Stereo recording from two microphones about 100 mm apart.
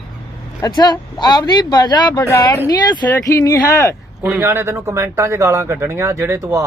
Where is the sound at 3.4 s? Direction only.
35° left (ahead or behind).